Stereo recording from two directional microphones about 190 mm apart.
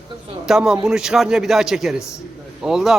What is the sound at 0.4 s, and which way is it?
Speech, centre (ahead or behind).